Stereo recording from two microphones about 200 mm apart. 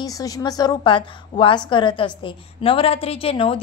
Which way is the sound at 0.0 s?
15° left (ahead or behind).